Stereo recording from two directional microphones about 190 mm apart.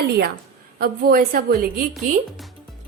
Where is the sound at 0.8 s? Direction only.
50° right (ahead or behind).